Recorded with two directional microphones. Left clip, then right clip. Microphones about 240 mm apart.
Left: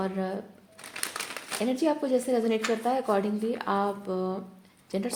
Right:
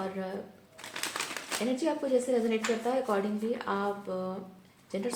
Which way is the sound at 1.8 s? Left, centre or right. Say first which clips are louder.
Left 3 dB; left.